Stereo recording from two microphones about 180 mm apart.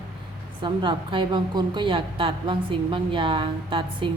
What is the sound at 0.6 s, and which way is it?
A woman's voice, 25° right (ahead or behind).